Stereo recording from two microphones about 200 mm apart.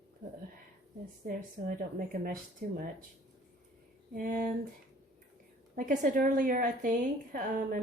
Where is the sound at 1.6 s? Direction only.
45° right (ahead or behind).